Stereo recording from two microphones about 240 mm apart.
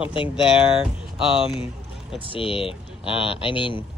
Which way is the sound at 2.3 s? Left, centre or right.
Left.